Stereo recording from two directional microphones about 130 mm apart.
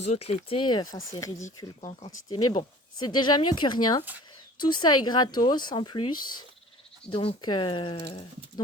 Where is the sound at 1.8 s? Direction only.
50° left (ahead or behind).